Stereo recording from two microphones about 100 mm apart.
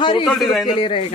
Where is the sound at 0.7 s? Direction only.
75° left (ahead or behind).